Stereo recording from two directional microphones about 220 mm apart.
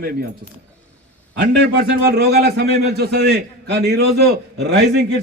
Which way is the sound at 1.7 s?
50° right (ahead or behind).